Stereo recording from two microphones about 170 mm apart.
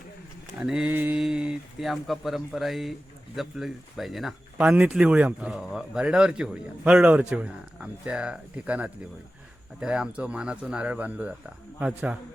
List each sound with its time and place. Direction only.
0.6 s speech: 5° right (ahead or behind)